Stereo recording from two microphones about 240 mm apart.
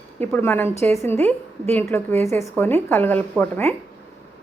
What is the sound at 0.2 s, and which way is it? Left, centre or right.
A woman's voice, centre.